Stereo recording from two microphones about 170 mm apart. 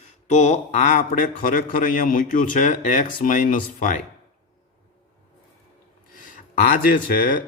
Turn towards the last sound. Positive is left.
turn(degrees=60)  # may be behind; listen again after turning